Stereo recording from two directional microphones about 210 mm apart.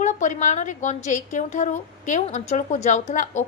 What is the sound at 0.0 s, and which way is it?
A woman's voice, 35° left (ahead or behind).